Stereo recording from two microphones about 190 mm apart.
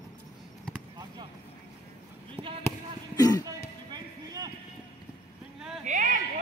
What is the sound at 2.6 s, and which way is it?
Basketball bounce, 20° left (ahead or behind).